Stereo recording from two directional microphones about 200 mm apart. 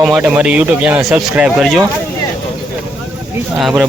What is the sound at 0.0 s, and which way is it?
Speech, 5° right (ahead or behind).